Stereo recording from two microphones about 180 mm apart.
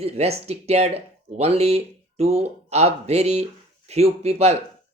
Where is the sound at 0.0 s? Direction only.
35° right (ahead or behind).